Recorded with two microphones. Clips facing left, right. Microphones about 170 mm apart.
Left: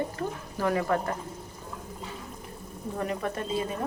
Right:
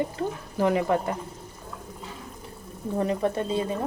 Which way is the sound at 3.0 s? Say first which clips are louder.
Right 6 dB; 25° right (ahead or behind).